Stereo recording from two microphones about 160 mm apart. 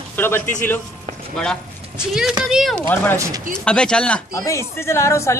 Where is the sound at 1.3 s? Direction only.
5° left (ahead or behind).